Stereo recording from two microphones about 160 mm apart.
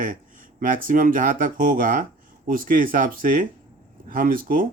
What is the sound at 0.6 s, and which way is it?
Speech, 60° right (ahead or behind).